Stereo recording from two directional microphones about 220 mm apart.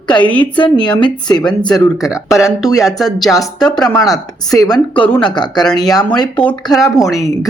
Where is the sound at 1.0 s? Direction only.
20° left (ahead or behind).